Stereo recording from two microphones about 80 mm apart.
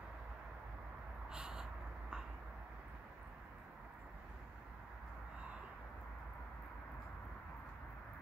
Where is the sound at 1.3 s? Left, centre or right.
Centre.